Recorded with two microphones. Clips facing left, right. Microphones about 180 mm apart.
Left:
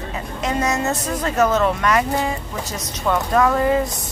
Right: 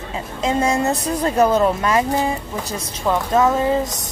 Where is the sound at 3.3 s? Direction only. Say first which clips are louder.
Even; 20° right (ahead or behind).